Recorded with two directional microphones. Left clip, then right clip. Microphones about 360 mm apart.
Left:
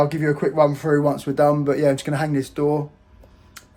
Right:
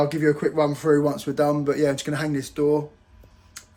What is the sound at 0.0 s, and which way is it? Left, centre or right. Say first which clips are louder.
Speech: left 1 dB; centre.